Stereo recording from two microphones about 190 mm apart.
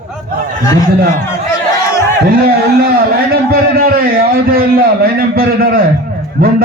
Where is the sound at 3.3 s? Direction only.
50° right (ahead or behind).